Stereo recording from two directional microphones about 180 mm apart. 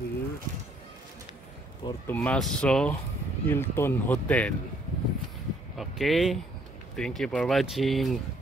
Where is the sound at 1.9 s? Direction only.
10° left (ahead or behind).